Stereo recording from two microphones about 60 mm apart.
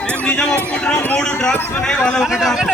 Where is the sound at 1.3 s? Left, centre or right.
Centre.